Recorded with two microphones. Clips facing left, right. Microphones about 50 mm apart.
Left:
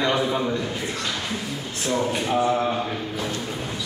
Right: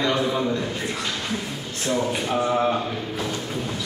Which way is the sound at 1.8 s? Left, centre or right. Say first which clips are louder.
Even; centre.